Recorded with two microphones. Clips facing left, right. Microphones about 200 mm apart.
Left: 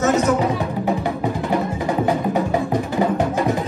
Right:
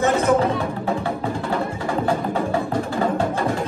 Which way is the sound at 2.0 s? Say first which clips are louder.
Left 2 dB; 15° left (ahead or behind).